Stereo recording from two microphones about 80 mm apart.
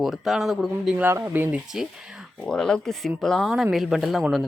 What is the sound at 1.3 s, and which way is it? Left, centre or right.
Speech, right.